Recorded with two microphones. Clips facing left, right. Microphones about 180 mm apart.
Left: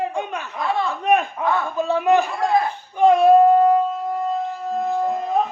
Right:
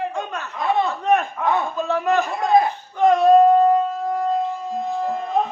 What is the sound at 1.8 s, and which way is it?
Speech, 15° left (ahead or behind).